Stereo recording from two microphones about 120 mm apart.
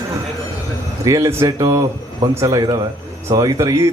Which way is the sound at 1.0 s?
25° right (ahead or behind).